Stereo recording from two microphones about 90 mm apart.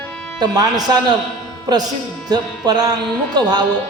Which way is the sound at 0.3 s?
50° right (ahead or behind).